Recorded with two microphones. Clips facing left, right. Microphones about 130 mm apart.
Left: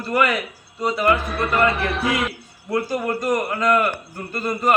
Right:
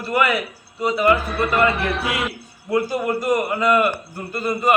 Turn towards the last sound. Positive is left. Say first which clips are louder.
# right 1 dB
turn(degrees=-5)  # may be behind; listen again after turning